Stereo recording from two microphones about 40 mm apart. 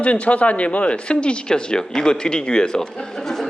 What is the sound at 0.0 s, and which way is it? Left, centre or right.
A man's voice, left.